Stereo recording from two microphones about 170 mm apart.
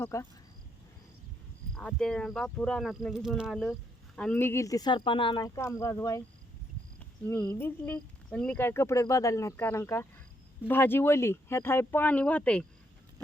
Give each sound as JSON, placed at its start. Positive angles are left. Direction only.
{"t": 0.0, "sound": "speech", "side_deg": 15}
{"t": 1.7, "sound": "speech", "side_deg": 5}
{"t": 5.5, "sound": "speech", "side_deg": 15}
{"t": 7.3, "sound": "speech", "side_deg": 10}